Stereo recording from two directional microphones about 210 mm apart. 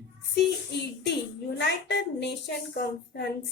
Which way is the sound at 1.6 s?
55° left (ahead or behind).